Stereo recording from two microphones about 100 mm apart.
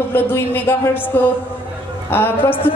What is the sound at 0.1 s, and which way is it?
A woman's voice, 20° left (ahead or behind).